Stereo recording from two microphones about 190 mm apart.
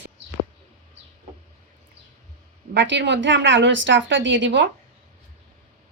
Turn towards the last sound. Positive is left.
turn(degrees=-75)  # may be behind; listen again after turning